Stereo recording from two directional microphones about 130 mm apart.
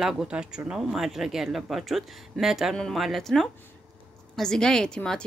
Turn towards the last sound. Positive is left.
turn(degrees=5)  # may be behind; listen again after turning